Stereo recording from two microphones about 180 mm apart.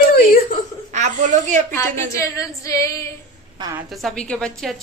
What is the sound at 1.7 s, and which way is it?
A woman's voice, 15° left (ahead or behind).